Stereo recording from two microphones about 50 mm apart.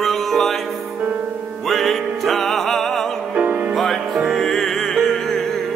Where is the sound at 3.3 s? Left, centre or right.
Right.